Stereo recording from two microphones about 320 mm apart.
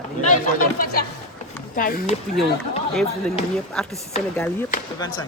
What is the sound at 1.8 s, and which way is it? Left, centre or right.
Speech, left.